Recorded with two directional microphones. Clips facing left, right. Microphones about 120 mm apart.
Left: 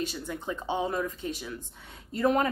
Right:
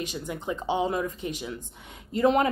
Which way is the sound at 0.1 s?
15° right (ahead or behind).